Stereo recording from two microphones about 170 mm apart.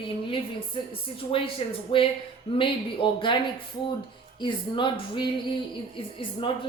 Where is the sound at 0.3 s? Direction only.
30° left (ahead or behind).